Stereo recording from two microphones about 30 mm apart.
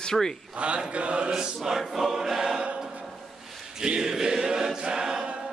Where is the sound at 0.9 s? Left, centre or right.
Right.